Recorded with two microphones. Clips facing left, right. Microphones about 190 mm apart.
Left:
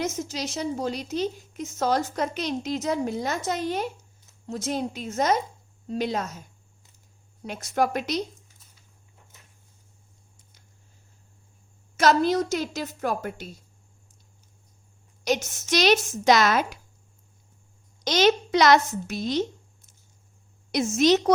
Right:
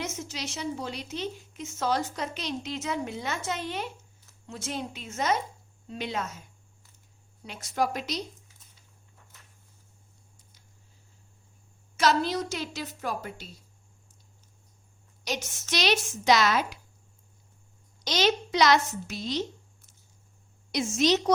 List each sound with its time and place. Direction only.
0.0 s a woman's voice: 40° left (ahead or behind)
7.4 s a woman's voice: 50° left (ahead or behind)
11.9 s a woman's voice: 50° left (ahead or behind)
15.2 s a woman's voice: 50° left (ahead or behind)
18.0 s a woman's voice: 50° left (ahead or behind)
20.9 s a woman's voice: 55° left (ahead or behind)